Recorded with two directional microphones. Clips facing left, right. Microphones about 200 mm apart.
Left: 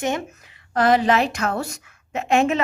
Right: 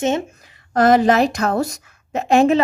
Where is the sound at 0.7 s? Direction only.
45° right (ahead or behind).